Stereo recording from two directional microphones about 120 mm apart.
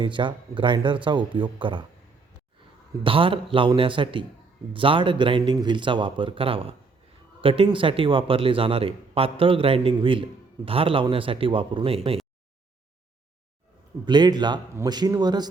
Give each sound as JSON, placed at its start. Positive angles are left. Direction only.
{"t": 0.0, "sound": "speech", "side_deg": -40}
{"t": 3.0, "sound": "speech", "side_deg": -45}
{"t": 14.0, "sound": "speech", "side_deg": -40}